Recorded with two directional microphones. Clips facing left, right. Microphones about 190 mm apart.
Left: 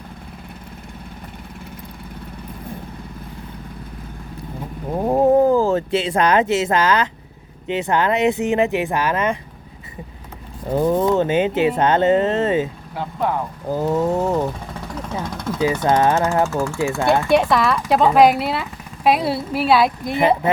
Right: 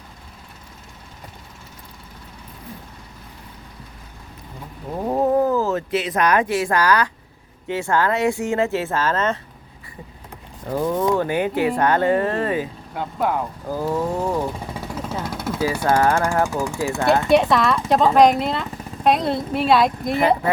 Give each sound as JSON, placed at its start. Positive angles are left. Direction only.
{"t": 5.0, "sound": "a sound", "side_deg": 25}
{"t": 7.7, "sound": "speech", "side_deg": 20}
{"t": 10.7, "sound": "speech", "side_deg": 25}
{"t": 12.9, "sound": "speech", "side_deg": 0}
{"t": 13.7, "sound": "speech", "side_deg": 20}
{"t": 14.7, "sound": "vehicle", "side_deg": -5}
{"t": 15.6, "sound": "speech", "side_deg": 20}
{"t": 16.5, "sound": "speech", "side_deg": -15}
{"t": 17.2, "sound": "speech", "side_deg": 0}
{"t": 20.4, "sound": "speech", "side_deg": 20}